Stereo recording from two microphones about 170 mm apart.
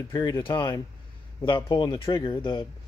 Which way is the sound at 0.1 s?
25° left (ahead or behind).